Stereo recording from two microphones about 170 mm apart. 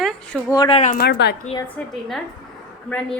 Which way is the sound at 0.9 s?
70° left (ahead or behind).